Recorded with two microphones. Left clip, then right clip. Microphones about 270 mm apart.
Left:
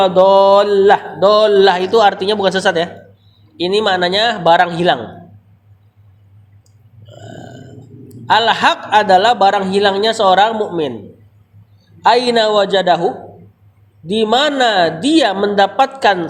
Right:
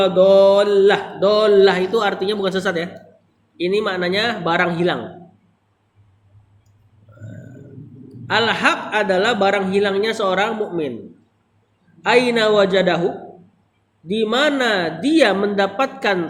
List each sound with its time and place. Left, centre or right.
0.0 s mantra: centre
8.3 s a man's voice: centre
12.0 s a man's voice: centre
14.1 s a man's voice: centre